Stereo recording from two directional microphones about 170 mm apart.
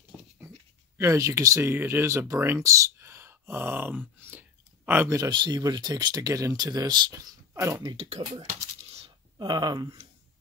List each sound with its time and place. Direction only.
0.9 s speech: 15° right (ahead or behind)
7.9 s speech: 35° right (ahead or behind)
8.5 s coin: 40° right (ahead or behind)
9.4 s speech: 25° right (ahead or behind)